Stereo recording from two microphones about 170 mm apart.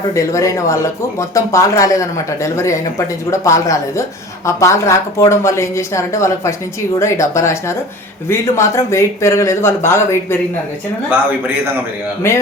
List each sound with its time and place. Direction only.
0.1 s a woman's voice: 20° left (ahead or behind)
12.2 s a woman's voice: 15° left (ahead or behind)